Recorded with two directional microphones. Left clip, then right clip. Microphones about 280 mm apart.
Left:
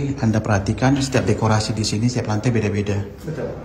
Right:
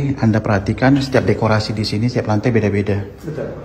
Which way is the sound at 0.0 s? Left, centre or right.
Centre.